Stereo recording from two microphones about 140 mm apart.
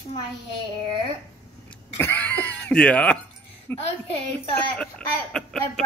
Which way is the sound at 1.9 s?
15° left (ahead or behind).